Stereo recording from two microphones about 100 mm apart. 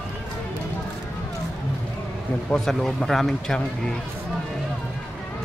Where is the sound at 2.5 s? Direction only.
5° left (ahead or behind).